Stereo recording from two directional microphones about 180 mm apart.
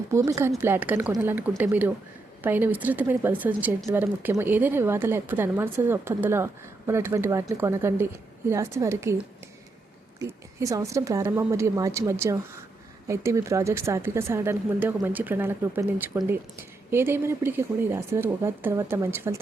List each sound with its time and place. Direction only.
0.1 s a woman's voice: 15° right (ahead or behind)